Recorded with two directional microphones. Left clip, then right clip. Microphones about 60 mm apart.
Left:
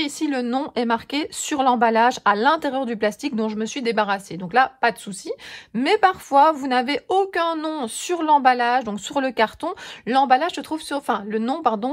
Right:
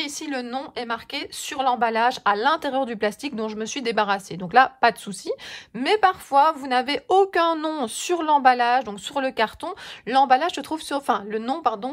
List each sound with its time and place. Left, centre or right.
0.0 s a woman's voice: centre
4.4 s a woman's voice: right
5.8 s a woman's voice: centre
7.1 s a woman's voice: right
8.7 s a woman's voice: centre; by 11.3 s right
11.3 s speech: right